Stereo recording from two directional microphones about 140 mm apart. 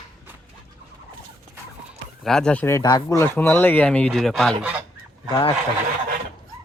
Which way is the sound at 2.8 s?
30° left (ahead or behind).